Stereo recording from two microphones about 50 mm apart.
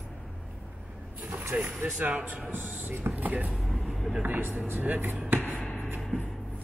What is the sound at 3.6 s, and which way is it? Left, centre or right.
Vehicle, centre.